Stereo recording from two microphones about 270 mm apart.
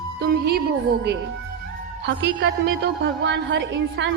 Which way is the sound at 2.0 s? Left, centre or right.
Right.